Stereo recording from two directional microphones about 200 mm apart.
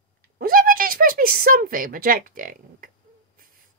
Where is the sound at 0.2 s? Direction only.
45° right (ahead or behind).